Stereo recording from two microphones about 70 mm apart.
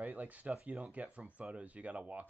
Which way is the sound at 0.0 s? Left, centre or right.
Right.